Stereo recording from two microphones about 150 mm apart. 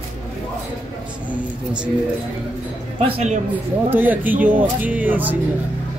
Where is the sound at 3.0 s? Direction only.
40° right (ahead or behind).